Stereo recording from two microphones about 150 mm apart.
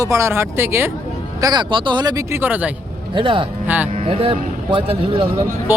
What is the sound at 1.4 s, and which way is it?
Speech, 30° right (ahead or behind).